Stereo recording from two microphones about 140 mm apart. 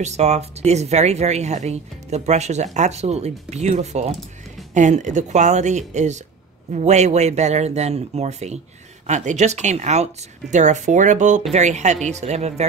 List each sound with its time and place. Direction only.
0.0 s speech: 55° right (ahead or behind)